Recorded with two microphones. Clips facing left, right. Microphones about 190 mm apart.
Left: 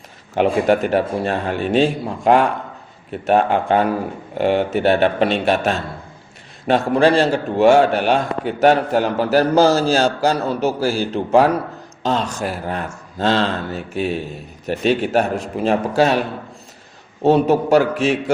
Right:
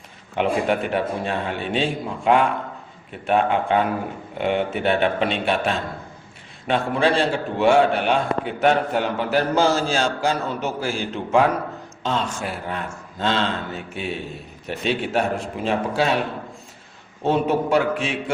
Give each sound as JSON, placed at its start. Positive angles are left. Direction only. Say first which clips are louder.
{"t": 0.3, "sound": "a man's voice", "louder": "left 5 dB", "side_deg": 40}
{"t": 6.7, "sound": "a man's voice", "louder": "left 5 dB", "side_deg": 40}
{"t": 17.2, "sound": "a man's voice", "louder": "left 6 dB", "side_deg": 40}